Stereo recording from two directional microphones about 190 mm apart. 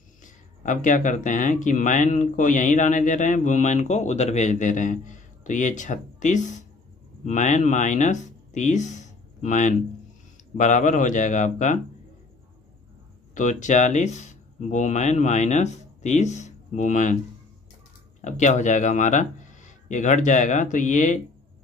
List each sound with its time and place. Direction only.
0.2 s speech: 40° left (ahead or behind)
13.3 s speech: 40° left (ahead or behind)
18.4 s speech: 40° left (ahead or behind)